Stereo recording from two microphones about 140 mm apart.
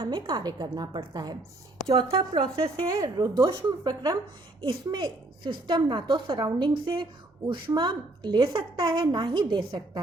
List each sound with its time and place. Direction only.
0.0 s a woman's voice: 30° right (ahead or behind)